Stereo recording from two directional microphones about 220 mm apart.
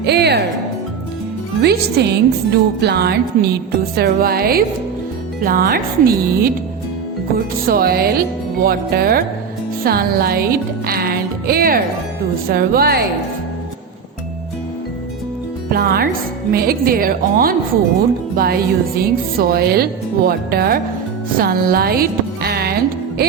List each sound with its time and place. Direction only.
0.0 s a woman's voice: 50° right (ahead or behind)
1.6 s a woman's voice: 50° right (ahead or behind)
15.7 s a woman's voice: 45° right (ahead or behind)